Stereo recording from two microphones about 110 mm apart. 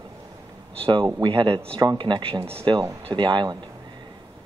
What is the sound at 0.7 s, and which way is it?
Speech, 50° right (ahead or behind).